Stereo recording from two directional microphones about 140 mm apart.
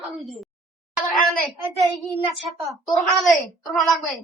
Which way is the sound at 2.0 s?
Centre (ahead or behind).